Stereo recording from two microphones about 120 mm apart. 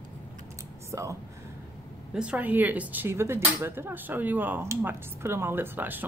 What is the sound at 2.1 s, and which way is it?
Speech, 10° right (ahead or behind).